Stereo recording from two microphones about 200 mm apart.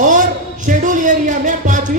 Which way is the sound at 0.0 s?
40° right (ahead or behind).